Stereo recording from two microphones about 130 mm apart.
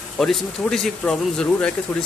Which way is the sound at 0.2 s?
5° left (ahead or behind).